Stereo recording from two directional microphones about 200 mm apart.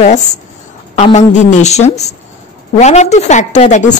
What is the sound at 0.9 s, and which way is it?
Speech, 35° left (ahead or behind).